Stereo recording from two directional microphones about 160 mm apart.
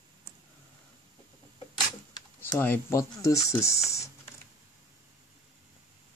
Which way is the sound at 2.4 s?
15° left (ahead or behind).